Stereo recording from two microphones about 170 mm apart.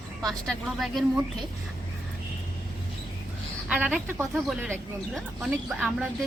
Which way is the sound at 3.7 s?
5° right (ahead or behind).